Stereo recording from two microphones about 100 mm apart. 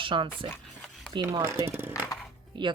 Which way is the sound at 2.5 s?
55° right (ahead or behind).